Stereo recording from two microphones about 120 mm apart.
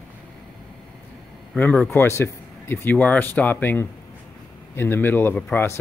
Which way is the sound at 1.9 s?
20° left (ahead or behind).